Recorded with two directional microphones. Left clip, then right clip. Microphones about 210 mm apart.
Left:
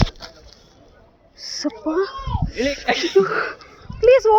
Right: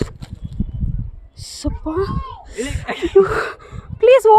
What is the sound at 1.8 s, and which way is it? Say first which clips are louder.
Speech: even; 25° right (ahead or behind).